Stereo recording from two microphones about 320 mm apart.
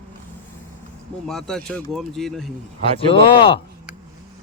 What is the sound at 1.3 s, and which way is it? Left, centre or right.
Speech, centre.